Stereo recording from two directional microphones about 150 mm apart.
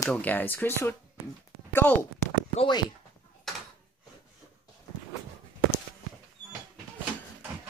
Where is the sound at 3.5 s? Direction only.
Centre (ahead or behind).